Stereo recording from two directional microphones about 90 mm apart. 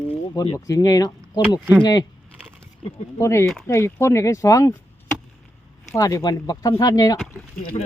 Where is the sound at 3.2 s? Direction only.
30° left (ahead or behind).